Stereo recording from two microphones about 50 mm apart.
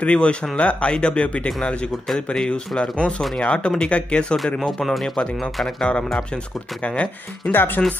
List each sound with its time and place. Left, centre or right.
0.0 s speech: left
4.7 s speech: centre
5.8 s speech: centre
7.5 s speech: left